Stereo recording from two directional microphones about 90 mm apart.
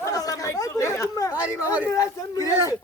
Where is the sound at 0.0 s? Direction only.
40° left (ahead or behind).